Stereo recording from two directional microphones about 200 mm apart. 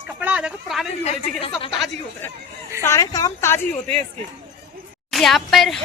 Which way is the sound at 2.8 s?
15° left (ahead or behind).